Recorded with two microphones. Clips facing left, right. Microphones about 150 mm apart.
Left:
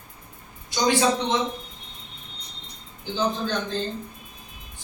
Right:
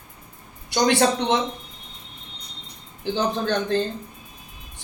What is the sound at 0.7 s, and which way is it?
Speech, 65° right (ahead or behind).